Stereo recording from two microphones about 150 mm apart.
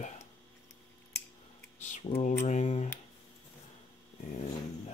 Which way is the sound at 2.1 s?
45° left (ahead or behind).